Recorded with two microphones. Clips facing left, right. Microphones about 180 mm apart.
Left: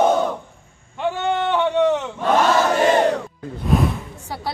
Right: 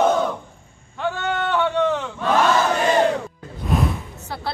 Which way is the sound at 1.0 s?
20° left (ahead or behind).